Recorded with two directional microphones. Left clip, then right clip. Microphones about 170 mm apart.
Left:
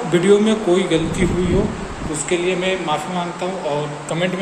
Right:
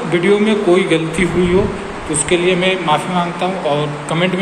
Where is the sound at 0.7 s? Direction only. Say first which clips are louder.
Right 5 dB; 20° left (ahead or behind).